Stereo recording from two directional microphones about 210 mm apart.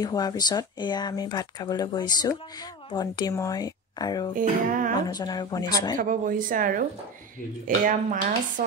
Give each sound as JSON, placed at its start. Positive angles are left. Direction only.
{"t": 0.0, "sound": "speech", "side_deg": 20}
{"t": 4.4, "sound": "a woman's voice", "side_deg": -40}
{"t": 5.0, "sound": "speech", "side_deg": 20}
{"t": 5.9, "sound": "a woman's voice", "side_deg": -40}
{"t": 8.6, "sound": "stir", "side_deg": -40}